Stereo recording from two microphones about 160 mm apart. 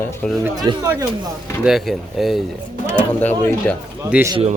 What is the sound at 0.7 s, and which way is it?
Speech, 25° right (ahead or behind).